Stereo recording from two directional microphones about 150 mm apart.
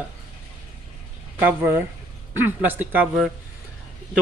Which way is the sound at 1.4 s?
10° right (ahead or behind).